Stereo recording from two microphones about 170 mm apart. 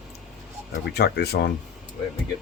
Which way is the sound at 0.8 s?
75° left (ahead or behind).